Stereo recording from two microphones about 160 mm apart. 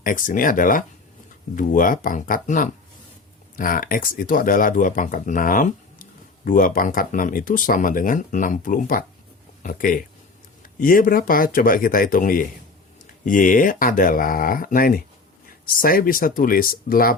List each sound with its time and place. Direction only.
0.0 s speech: 60° left (ahead or behind)